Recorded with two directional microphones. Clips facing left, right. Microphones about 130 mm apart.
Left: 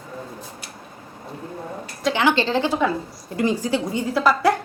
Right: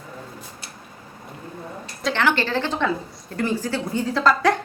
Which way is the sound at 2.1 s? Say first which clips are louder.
Left 2 dB; 15° left (ahead or behind).